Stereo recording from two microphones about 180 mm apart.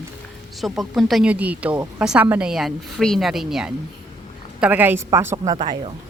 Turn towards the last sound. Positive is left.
turn(degrees=-30)  # may be behind; listen again after turning